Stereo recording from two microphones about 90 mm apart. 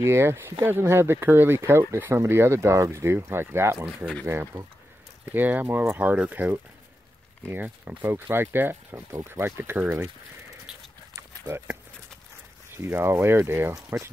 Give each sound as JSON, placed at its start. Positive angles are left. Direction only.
{"t": 0.0, "sound": "speech", "side_deg": -30}
{"t": 4.0, "sound": "speech", "side_deg": 10}
{"t": 4.3, "sound": "speech", "side_deg": -30}
{"t": 11.4, "sound": "speech", "side_deg": -25}
{"t": 12.7, "sound": "speech", "side_deg": -25}